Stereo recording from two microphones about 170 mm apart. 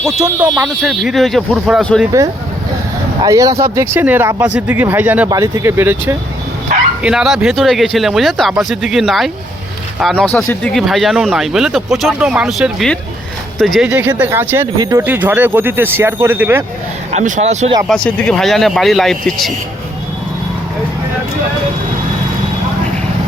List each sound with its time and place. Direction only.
0.5 s speech: centre (ahead or behind)
3.2 s speech: 20° right (ahead or behind)
17.1 s speech: 45° right (ahead or behind)
17.8 s speech: 5° left (ahead or behind)